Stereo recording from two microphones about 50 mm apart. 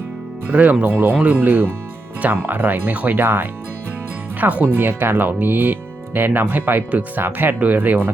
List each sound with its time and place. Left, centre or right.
0.5 s speech: right
4.4 s speech: right
7.6 s speech: right